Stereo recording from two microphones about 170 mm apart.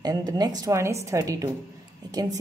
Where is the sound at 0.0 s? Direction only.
25° right (ahead or behind).